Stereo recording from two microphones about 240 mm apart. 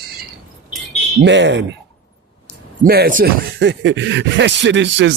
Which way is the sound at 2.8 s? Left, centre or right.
Right.